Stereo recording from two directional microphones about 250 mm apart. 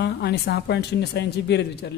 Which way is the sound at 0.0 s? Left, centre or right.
Left.